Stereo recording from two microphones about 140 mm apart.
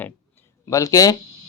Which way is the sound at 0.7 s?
25° left (ahead or behind).